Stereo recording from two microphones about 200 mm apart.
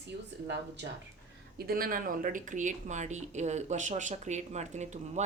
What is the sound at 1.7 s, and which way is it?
Speech, 45° right (ahead or behind).